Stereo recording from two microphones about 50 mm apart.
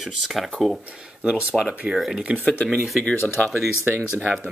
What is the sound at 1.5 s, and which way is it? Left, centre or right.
Speech, centre.